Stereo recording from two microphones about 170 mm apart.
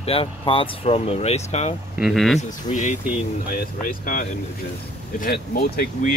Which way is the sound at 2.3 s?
45° left (ahead or behind).